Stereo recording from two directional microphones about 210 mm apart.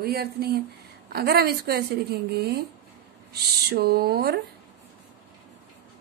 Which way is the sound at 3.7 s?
50° right (ahead or behind).